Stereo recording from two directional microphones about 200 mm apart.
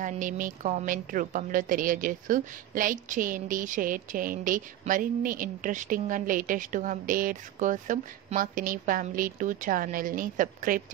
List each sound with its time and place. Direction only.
0.0 s a woman's voice: 40° right (ahead or behind)